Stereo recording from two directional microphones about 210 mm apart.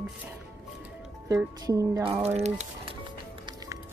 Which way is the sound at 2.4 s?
30° right (ahead or behind).